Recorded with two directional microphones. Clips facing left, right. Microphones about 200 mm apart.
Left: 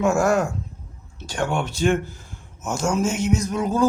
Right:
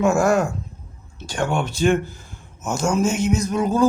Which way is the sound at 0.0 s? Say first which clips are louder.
Right 2 dB; 10° right (ahead or behind).